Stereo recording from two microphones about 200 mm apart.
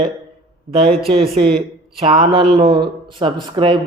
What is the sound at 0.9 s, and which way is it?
Speech, centre (ahead or behind).